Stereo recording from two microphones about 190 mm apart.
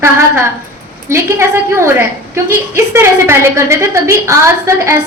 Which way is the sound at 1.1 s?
15° right (ahead or behind).